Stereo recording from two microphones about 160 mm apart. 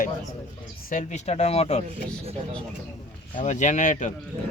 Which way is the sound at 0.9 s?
50° left (ahead or behind).